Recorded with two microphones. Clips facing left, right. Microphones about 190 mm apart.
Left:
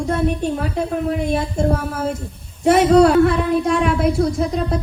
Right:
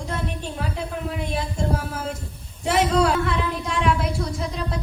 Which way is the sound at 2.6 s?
45° left (ahead or behind).